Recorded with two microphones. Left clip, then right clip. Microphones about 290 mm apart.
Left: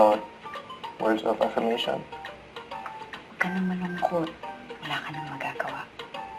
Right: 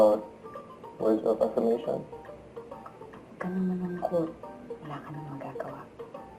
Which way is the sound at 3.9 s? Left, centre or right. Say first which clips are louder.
Left 3 dB; centre.